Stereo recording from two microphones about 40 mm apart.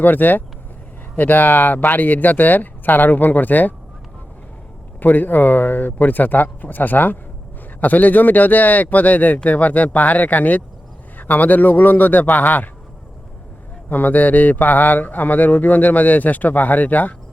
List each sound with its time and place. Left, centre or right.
0.0 s speech: left
4.9 s speech: left
13.9 s speech: left